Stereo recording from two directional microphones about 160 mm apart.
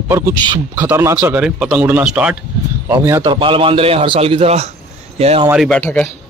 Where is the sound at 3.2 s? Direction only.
30° right (ahead or behind).